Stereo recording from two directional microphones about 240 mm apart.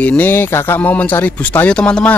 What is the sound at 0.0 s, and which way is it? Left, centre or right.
Speech, centre.